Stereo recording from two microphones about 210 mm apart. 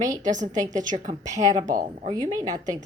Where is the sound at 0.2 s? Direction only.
35° right (ahead or behind).